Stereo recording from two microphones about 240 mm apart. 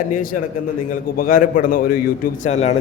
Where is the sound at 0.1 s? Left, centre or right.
Left.